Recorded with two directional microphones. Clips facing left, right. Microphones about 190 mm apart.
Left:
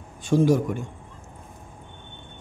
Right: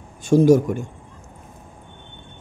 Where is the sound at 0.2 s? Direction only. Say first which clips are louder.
Right 6 dB; 45° right (ahead or behind).